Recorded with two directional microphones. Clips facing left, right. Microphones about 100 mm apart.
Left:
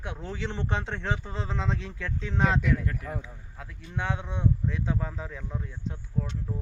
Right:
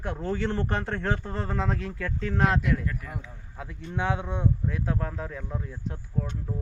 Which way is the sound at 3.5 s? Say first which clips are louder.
Right 4 dB; 5° right (ahead or behind).